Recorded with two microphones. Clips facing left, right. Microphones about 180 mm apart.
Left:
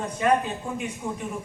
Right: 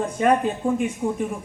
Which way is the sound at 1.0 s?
35° right (ahead or behind).